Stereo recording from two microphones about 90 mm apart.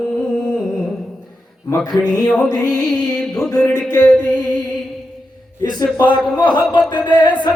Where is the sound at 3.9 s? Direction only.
15° left (ahead or behind).